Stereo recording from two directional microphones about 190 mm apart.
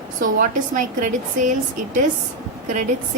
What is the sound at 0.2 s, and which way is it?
Speech, 45° right (ahead or behind).